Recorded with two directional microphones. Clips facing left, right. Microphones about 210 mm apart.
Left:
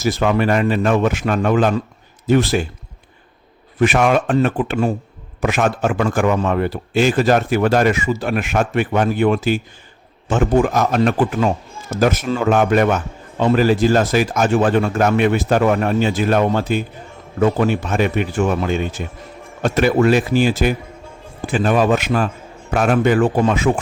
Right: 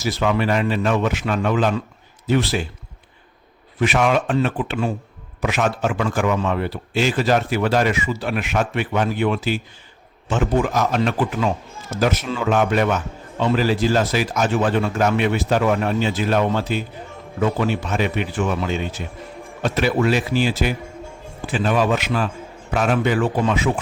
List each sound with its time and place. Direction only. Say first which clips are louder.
0.0 s a man's voice: left 3 dB; 50° left (ahead or behind)
3.8 s a man's voice: left 3 dB; 50° left (ahead or behind)